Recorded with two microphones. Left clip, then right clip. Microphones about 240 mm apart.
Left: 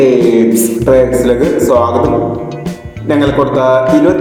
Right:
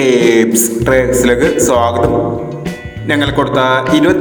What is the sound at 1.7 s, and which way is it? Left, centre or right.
Music, right.